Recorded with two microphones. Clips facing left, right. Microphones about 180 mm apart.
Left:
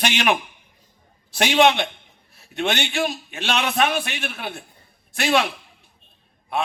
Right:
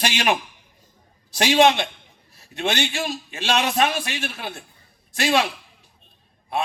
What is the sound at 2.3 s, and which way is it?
A man's voice, 60° left (ahead or behind).